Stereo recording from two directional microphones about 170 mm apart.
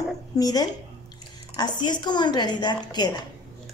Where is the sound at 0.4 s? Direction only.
20° left (ahead or behind).